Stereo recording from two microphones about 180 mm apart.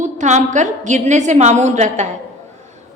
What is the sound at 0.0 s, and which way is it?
A woman's voice, 40° right (ahead or behind).